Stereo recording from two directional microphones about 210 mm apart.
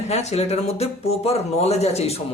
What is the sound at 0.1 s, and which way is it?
Speech, 30° left (ahead or behind).